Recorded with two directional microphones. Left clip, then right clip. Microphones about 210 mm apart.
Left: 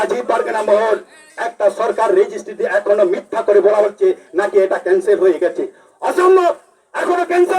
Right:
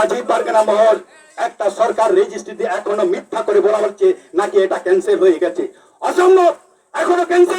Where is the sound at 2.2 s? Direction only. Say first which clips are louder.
Left 1 dB; 40° right (ahead or behind).